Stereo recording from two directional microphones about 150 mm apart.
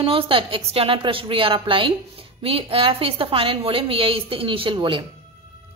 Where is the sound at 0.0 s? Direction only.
35° right (ahead or behind).